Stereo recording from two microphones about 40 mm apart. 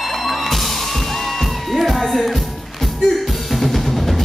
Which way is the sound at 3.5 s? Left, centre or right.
Centre.